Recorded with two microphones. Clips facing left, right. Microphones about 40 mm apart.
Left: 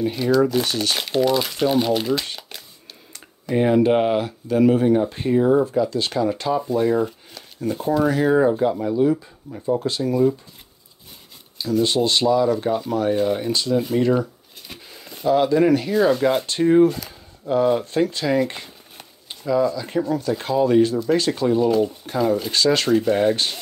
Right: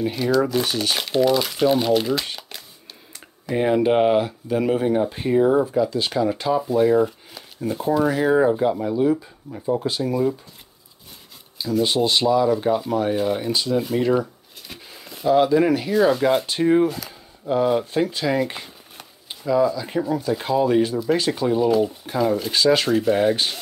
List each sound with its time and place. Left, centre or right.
0.0 s speech: centre
11.5 s speech: centre